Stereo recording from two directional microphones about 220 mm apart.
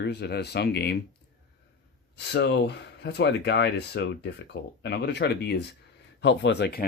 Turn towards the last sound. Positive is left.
turn(degrees=50)  # may be behind; listen again after turning